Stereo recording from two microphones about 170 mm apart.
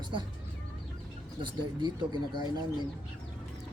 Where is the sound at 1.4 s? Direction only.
25° right (ahead or behind).